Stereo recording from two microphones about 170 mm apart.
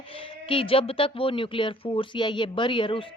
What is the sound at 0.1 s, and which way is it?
Speech, 30° left (ahead or behind).